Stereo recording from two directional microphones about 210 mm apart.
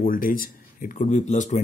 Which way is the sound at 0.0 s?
40° left (ahead or behind).